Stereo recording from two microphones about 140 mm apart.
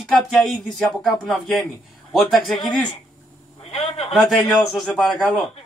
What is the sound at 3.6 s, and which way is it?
Speech, 45° left (ahead or behind).